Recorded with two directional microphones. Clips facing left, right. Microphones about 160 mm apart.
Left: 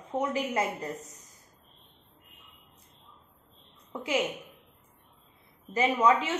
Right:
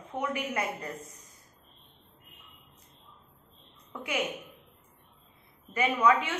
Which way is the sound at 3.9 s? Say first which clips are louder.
Left 4 dB; 25° left (ahead or behind).